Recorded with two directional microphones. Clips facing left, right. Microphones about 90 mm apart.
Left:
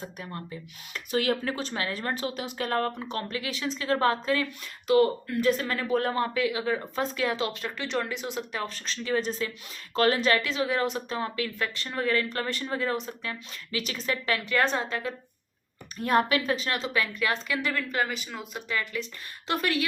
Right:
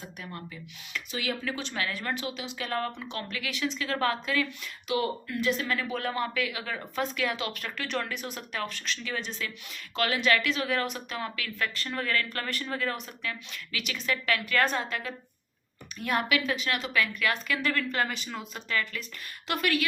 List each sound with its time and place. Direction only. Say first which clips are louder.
0.0 s speech: left 3 dB; 35° left (ahead or behind)
8.6 s speech: left 2 dB; 35° left (ahead or behind)
17.7 s speech: even; 5° left (ahead or behind)
18.7 s speech: even; 15° left (ahead or behind)
19.5 s speech: left 1 dB; 30° left (ahead or behind)